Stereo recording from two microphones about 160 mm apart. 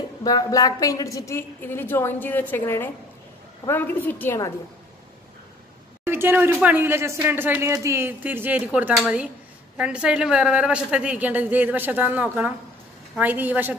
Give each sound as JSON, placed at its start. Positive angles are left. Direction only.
{"t": 0.2, "sound": "a woman's voice", "side_deg": 25}
{"t": 6.0, "sound": "speech", "side_deg": -15}